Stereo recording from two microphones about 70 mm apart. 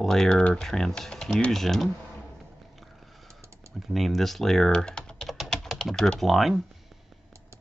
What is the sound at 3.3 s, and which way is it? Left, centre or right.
Typing, right.